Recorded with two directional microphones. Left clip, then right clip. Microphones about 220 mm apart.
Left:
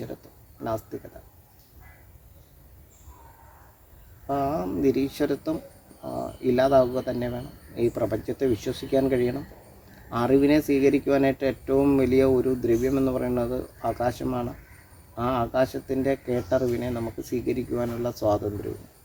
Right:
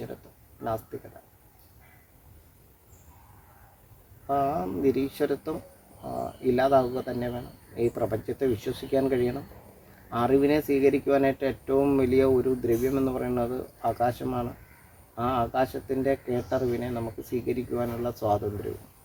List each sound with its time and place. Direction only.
4.3 s speech: 15° left (ahead or behind)